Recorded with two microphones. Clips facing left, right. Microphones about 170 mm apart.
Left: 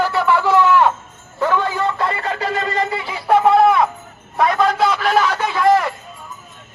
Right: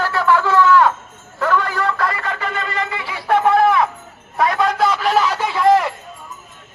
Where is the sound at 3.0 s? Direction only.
15° left (ahead or behind).